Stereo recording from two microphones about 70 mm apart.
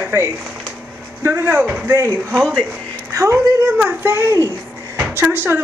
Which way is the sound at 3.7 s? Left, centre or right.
Right.